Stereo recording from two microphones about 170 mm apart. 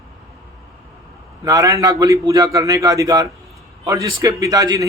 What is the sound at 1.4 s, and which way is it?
Speech, 20° right (ahead or behind).